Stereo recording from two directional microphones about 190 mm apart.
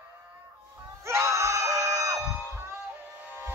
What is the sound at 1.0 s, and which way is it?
Screaming, 15° right (ahead or behind).